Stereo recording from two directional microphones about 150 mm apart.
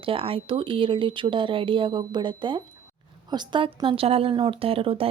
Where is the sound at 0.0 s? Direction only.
35° right (ahead or behind).